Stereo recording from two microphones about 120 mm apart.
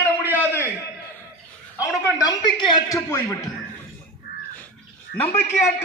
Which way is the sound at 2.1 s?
35° left (ahead or behind).